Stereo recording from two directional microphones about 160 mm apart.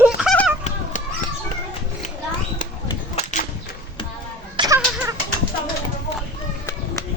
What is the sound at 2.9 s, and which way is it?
Cap gun, 45° left (ahead or behind).